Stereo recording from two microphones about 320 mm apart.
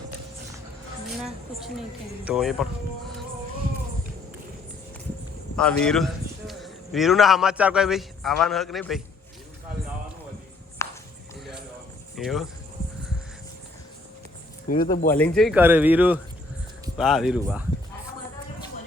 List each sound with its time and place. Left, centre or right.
1.2 s a woman's voice: centre
5.5 s a man's voice: centre
10.8 s a sound: centre
12.1 s speech: centre
14.7 s speech: left
15.1 s speech: centre